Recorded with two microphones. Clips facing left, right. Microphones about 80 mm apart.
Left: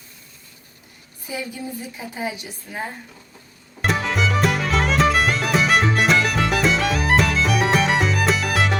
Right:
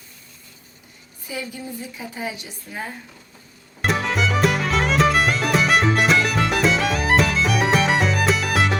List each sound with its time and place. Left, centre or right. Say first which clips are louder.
1.3 s a woman's voice: left 1 dB; left
3.8 s music: even; centre